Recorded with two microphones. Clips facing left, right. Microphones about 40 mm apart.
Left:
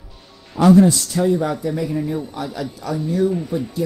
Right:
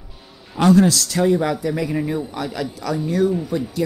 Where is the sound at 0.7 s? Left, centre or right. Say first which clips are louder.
Left 2 dB; right.